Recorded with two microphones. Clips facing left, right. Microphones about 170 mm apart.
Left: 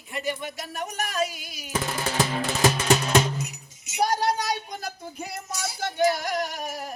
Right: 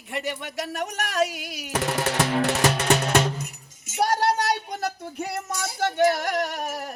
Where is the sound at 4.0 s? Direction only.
70° right (ahead or behind).